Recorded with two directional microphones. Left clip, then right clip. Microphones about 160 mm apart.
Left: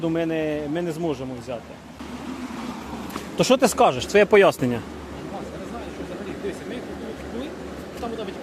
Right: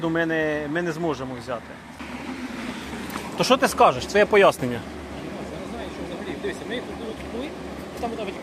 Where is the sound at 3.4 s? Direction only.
90° left; by 4.5 s 70° left (ahead or behind).